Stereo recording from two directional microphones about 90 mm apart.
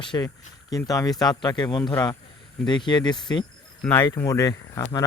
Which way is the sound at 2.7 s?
55° left (ahead or behind).